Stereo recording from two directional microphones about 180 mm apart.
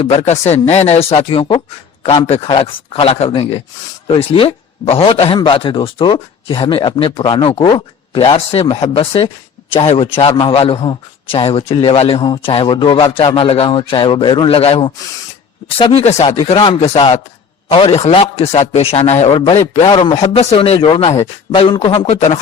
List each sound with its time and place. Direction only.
0.0 s a man's voice: 30° left (ahead or behind)